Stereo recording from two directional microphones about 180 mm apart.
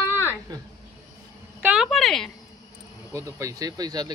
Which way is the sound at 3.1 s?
15° right (ahead or behind).